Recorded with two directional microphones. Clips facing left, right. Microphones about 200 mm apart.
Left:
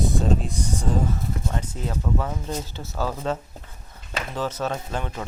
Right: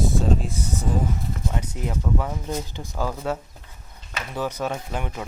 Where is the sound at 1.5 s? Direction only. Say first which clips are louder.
Even; 15° right (ahead or behind).